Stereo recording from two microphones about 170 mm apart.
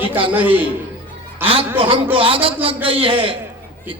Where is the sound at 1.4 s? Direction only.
35° right (ahead or behind).